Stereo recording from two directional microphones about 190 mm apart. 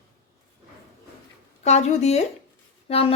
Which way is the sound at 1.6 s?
35° left (ahead or behind).